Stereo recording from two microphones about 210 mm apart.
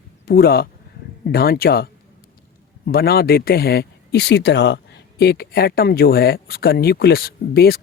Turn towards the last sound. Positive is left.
turn(degrees=45)  # may be behind; listen again after turning